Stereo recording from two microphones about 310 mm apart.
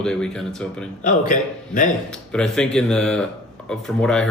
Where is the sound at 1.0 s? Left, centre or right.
Left.